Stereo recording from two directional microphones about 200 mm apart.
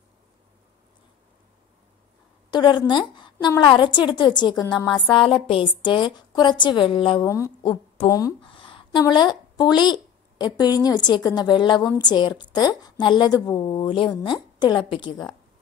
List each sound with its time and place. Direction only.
2.5 s a woman's voice: 20° left (ahead or behind)
9.8 s a sound: 20° left (ahead or behind)
10.8 s a woman's voice: 20° left (ahead or behind)